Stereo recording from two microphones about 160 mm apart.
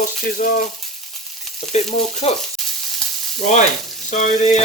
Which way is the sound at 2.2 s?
35° left (ahead or behind).